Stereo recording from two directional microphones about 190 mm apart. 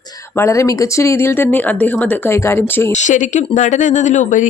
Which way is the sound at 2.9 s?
40° left (ahead or behind).